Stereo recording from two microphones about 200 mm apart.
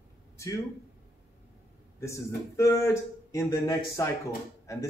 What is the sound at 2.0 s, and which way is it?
A man's voice, 15° left (ahead or behind).